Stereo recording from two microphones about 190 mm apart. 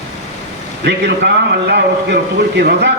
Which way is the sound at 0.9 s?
65° right (ahead or behind).